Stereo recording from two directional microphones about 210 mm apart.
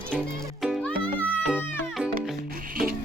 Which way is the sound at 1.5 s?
5° right (ahead or behind).